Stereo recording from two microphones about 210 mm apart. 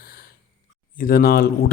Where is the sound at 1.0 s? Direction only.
45° left (ahead or behind).